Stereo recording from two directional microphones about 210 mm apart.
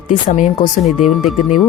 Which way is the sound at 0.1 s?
35° left (ahead or behind).